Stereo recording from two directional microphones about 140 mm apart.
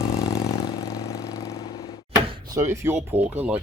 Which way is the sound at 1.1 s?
25° left (ahead or behind).